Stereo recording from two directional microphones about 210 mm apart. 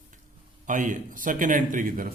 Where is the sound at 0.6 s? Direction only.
40° right (ahead or behind).